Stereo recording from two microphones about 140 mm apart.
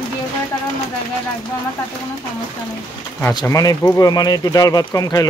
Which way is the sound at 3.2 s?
20° left (ahead or behind).